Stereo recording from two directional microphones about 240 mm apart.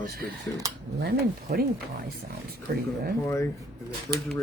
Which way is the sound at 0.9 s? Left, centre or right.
Right.